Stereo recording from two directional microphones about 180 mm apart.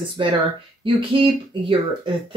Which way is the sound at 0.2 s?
30° right (ahead or behind).